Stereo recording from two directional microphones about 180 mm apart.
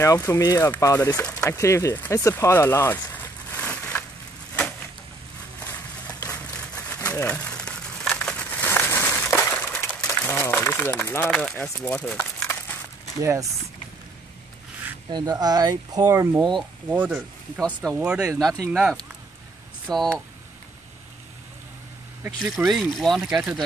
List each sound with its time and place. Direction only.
0.0 s speech: 15° left (ahead or behind)
3.5 s crushing: 10° left (ahead or behind)
5.7 s a sound: 10° left (ahead or behind)
7.1 s crumpling: 10° left (ahead or behind)
13.2 s speech: 15° right (ahead or behind)
15.0 s speech: 25° right (ahead or behind); by 17.2 s 10° right (ahead or behind)
17.6 s speech: 5° left (ahead or behind)
18.4 s speech: 20° right (ahead or behind)
18.7 s speech: 5° right (ahead or behind)
22.7 s speech: centre (ahead or behind)